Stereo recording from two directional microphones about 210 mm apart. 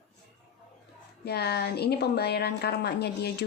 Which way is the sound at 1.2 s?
50° left (ahead or behind).